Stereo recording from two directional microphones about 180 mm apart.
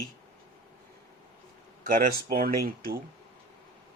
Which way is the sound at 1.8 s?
50° right (ahead or behind).